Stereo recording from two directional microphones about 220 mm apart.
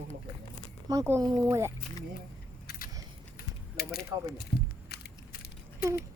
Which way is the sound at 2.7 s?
40° left (ahead or behind).